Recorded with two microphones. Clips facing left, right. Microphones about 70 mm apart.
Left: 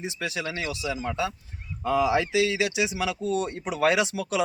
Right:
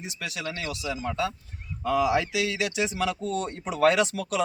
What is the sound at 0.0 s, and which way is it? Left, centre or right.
Speech, left.